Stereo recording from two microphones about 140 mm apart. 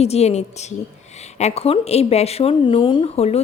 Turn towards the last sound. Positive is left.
turn(degrees=45)  # may be behind; listen again after turning